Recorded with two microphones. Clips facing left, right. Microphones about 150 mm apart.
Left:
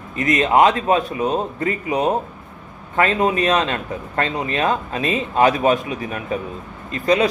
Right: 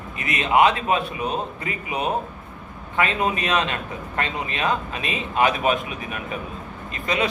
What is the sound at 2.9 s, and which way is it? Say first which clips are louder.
A man's voice: left 5 dB; 40° left (ahead or behind).